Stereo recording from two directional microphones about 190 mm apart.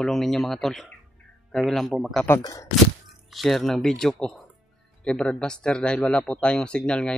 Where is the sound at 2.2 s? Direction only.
15° left (ahead or behind).